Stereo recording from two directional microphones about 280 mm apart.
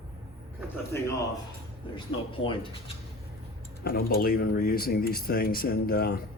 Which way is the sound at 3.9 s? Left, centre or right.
Left.